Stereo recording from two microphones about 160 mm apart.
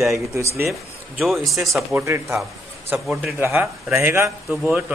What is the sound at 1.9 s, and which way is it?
Speech, 15° right (ahead or behind).